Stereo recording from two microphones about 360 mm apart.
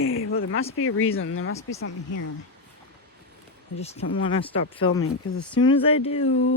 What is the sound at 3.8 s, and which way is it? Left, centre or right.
Speech, centre.